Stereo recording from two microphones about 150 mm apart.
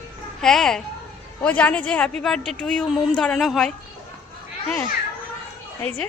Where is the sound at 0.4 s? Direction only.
5° left (ahead or behind).